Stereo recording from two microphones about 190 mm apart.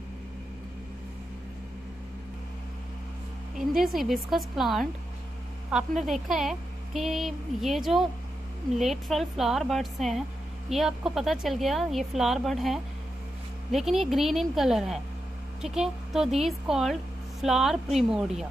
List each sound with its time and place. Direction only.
3.5 s speech: centre (ahead or behind)
9.1 s speech: centre (ahead or behind)